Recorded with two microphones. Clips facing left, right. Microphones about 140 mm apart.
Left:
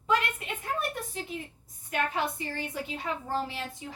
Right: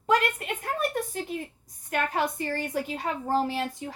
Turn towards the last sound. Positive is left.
turn(degrees=-45)  # may be behind; listen again after turning